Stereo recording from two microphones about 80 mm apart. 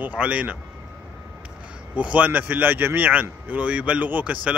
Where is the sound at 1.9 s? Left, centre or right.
Centre.